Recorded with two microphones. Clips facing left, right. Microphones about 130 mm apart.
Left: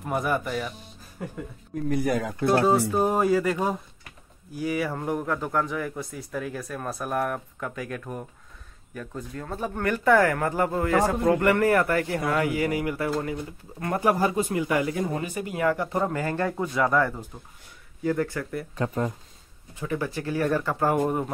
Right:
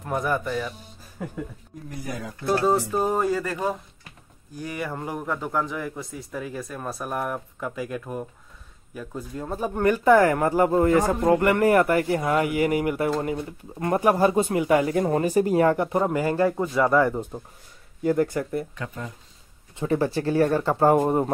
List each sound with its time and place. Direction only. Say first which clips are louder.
0.0 s speech: right 1 dB; 10° left (ahead or behind)
1.9 s speech: left 9 dB; 65° left (ahead or behind)
3.0 s speech: left 1 dB; 10° left (ahead or behind); by 14.9 s 25° right (ahead or behind)
14.9 s speech: right 6 dB; 45° right (ahead or behind)
15.8 s speech: right 4 dB; 15° right (ahead or behind)
17.1 s speech: right 8 dB; 30° right (ahead or behind)
18.8 s speech: left 7 dB; 45° left (ahead or behind)
19.7 s speech: right 6 dB; 30° right (ahead or behind)